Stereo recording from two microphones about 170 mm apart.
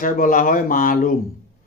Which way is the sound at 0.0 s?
55° left (ahead or behind).